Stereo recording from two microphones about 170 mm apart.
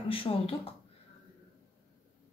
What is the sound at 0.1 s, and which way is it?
Speech, 35° left (ahead or behind).